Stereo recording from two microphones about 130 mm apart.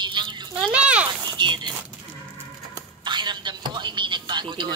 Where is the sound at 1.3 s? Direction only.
35° right (ahead or behind).